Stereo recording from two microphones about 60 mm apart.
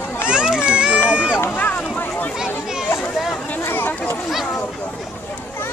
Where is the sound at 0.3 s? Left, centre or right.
Centre.